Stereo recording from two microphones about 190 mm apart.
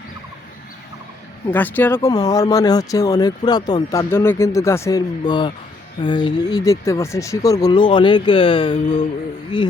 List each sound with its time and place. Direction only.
1.5 s speech: 10° left (ahead or behind); by 9.7 s 25° left (ahead or behind)